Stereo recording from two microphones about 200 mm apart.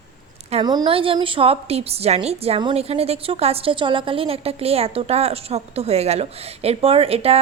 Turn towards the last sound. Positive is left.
turn(degrees=-30)  # may be behind; listen again after turning